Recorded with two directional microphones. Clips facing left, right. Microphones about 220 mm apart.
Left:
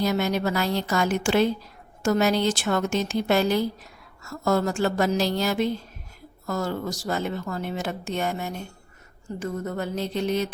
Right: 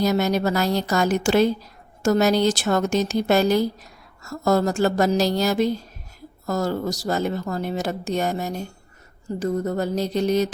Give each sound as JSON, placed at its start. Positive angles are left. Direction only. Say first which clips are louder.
{"t": 0.0, "sound": "speech", "louder": "right 3 dB", "side_deg": -40}